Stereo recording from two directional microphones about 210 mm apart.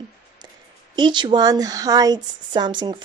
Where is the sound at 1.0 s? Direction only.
20° right (ahead or behind).